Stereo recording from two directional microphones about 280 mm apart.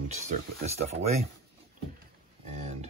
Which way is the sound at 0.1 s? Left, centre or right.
Right.